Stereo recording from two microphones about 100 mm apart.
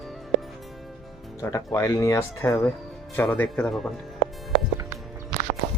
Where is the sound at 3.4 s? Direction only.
5° left (ahead or behind).